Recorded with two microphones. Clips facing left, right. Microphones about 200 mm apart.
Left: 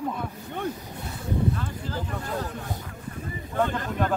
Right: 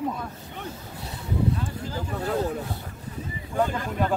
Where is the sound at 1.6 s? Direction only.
10° right (ahead or behind).